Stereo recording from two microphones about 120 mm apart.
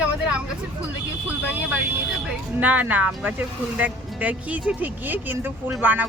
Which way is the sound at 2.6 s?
15° right (ahead or behind).